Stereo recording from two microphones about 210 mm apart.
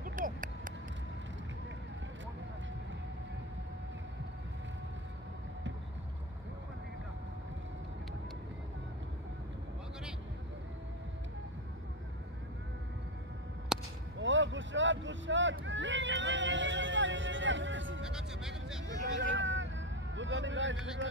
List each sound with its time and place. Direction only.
0.0 s a sound: 40° right (ahead or behind)
13.7 s a sound: 5° right (ahead or behind)
14.1 s vehicle: 60° right (ahead or behind)
18.0 s music: 5° right (ahead or behind)
18.9 s vehicle: 60° right (ahead or behind)
21.0 s music: 60° right (ahead or behind)